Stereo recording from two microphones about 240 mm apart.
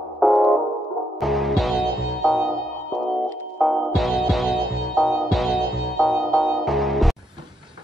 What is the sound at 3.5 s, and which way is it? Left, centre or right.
Music, centre.